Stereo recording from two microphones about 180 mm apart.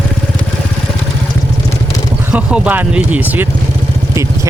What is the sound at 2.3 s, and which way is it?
Speech, 10° right (ahead or behind).